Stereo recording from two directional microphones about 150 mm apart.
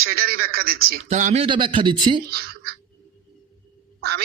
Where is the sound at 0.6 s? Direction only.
80° right.